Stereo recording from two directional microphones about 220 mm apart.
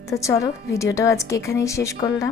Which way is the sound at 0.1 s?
15° left (ahead or behind).